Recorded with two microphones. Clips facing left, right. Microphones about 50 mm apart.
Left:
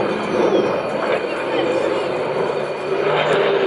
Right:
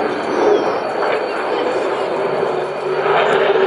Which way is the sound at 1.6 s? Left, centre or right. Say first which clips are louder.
Left 2 dB; right.